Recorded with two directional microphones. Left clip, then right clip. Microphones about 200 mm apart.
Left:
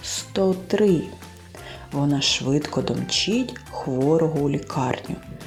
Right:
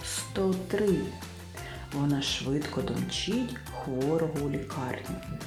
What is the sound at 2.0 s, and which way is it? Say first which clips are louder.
Speech: left 8 dB; 20° left (ahead or behind).